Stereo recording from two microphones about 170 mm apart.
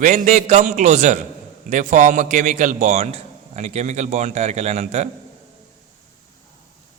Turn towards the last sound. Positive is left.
turn(degrees=-40)  # may be behind; listen again after turning